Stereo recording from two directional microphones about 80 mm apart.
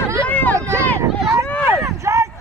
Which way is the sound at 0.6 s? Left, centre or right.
Left.